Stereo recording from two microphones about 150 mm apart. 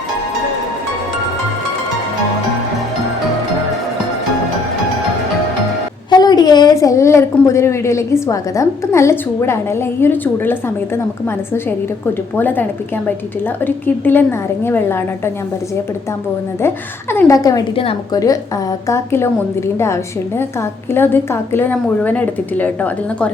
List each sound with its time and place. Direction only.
6.1 s a woman's voice: 30° left (ahead or behind)
12.4 s a woman's voice: 10° left (ahead or behind)
16.6 s a woman's voice: 15° left (ahead or behind)